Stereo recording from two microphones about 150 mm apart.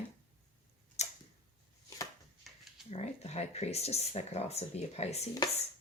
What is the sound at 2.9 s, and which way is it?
Speech, 45° left (ahead or behind).